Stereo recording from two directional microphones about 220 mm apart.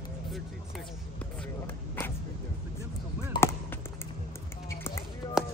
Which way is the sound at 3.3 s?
10° left (ahead or behind).